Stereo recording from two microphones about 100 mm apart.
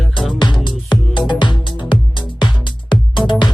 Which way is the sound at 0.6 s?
50° left (ahead or behind).